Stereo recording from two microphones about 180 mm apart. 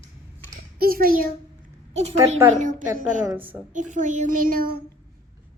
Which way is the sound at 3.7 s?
45° right (ahead or behind).